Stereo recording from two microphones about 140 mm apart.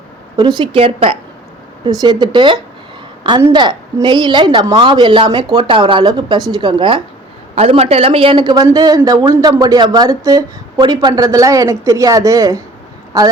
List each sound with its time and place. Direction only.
0.3 s speech: 30° right (ahead or behind)
1.8 s speech: 30° right (ahead or behind)
7.5 s a woman's voice: 45° right (ahead or behind); by 13.3 s 25° right (ahead or behind)